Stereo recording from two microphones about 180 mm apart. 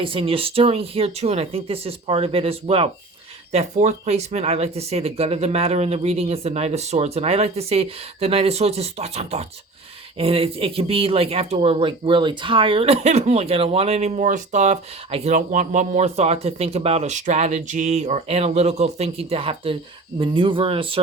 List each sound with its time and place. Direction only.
0.0 s speech: 30° right (ahead or behind)